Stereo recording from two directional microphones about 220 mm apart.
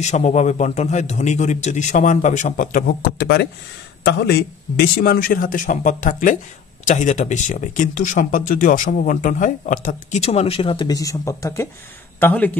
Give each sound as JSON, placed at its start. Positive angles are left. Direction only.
{"t": 0.0, "sound": "speech", "side_deg": 30}